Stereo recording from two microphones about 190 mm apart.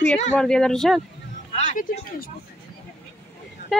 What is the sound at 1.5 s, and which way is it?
Speech, 40° left (ahead or behind).